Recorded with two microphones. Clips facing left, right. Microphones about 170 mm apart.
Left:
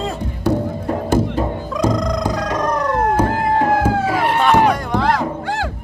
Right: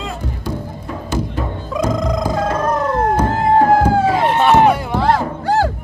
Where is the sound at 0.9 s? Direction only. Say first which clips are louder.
Left 5 dB; 45° left (ahead or behind).